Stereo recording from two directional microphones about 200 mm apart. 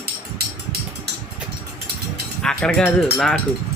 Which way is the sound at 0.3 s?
55° right (ahead or behind).